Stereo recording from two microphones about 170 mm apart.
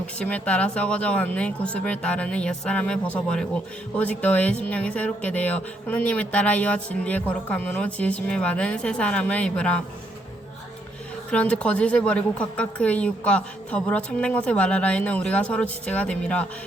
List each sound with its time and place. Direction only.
0.2 s speech: 5° left (ahead or behind)
11.3 s speech: 5° left (ahead or behind)